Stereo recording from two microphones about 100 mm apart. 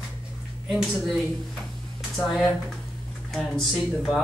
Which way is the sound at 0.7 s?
5° right (ahead or behind).